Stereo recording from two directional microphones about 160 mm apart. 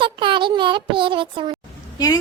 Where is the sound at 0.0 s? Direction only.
30° right (ahead or behind).